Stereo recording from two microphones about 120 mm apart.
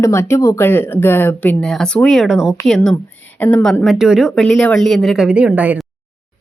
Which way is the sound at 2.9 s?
15° left (ahead or behind).